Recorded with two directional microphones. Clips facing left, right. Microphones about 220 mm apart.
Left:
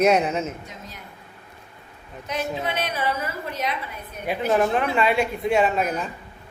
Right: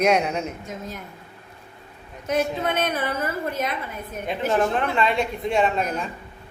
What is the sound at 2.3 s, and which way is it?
A woman's voice, 50° right (ahead or behind).